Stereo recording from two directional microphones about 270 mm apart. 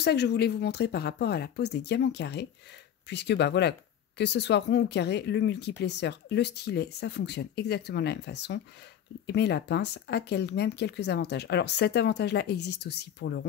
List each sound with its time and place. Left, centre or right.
0.0 s speech: left